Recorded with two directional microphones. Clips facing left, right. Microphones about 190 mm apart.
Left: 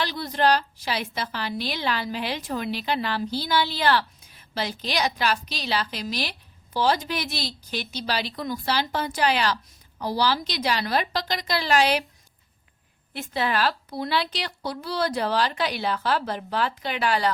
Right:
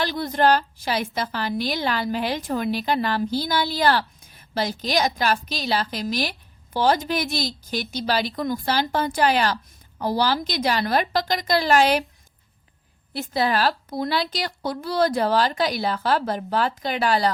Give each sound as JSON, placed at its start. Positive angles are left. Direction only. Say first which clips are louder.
{"t": 0.0, "sound": "a woman's voice", "louder": "right 3 dB", "side_deg": -50}
{"t": 13.1, "sound": "a woman's voice", "louder": "right 3 dB", "side_deg": -40}